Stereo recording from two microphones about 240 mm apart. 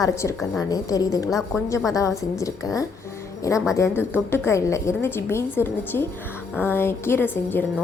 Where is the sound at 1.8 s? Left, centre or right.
Centre.